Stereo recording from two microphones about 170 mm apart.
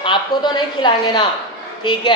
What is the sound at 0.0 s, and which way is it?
A woman's voice, 25° left (ahead or behind).